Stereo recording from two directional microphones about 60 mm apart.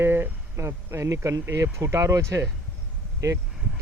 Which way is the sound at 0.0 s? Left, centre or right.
Right.